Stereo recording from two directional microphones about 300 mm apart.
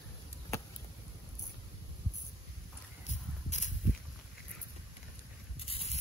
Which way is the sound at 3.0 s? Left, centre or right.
Left.